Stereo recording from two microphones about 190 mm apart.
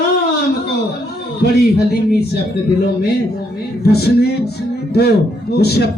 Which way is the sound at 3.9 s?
55° left (ahead or behind).